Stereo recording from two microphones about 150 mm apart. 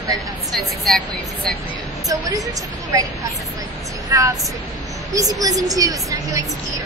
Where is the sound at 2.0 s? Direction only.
20° right (ahead or behind).